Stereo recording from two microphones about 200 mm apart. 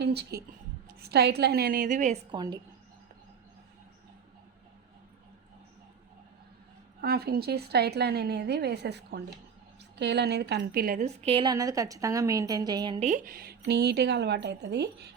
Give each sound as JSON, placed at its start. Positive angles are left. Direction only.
{"t": 0.0, "sound": "a woman's voice", "side_deg": -55}
{"t": 2.3, "sound": "a woman's voice", "side_deg": -20}
{"t": 7.0, "sound": "a woman's voice", "side_deg": -50}
{"t": 13.1, "sound": "a woman's voice", "side_deg": -40}